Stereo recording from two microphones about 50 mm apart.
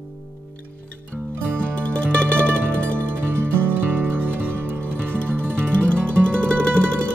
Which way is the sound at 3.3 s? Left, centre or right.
Right.